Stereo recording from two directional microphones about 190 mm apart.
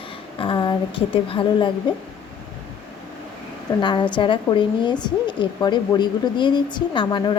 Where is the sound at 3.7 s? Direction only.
25° left (ahead or behind).